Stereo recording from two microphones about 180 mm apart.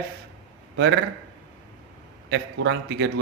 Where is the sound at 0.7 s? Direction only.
90° right.